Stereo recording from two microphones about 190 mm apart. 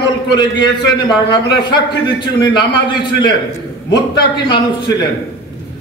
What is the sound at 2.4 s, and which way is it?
Speech, 25° left (ahead or behind).